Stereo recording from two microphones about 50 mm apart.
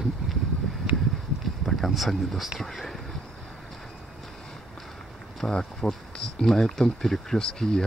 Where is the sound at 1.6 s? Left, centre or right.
Centre.